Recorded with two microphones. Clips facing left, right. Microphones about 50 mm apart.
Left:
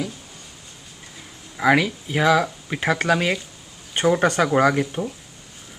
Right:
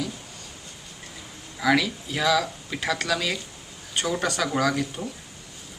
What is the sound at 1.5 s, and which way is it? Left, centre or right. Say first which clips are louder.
Speech: left 4 dB; left.